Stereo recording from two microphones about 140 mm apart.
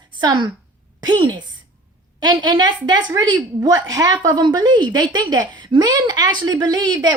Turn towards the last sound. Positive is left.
turn(degrees=-30)  # may be behind; listen again after turning